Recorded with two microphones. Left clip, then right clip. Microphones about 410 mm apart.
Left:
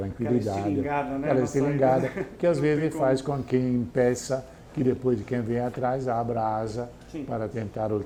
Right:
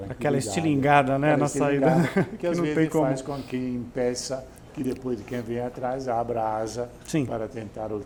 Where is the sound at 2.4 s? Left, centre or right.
Left.